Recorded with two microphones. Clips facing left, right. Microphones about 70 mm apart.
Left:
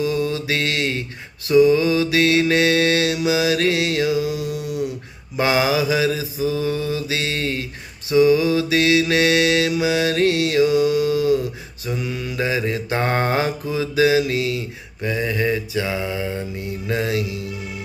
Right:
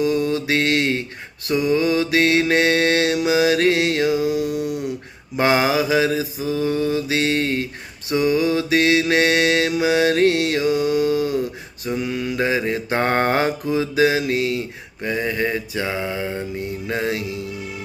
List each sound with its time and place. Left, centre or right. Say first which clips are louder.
0.0 s mantra: right 2 dB; right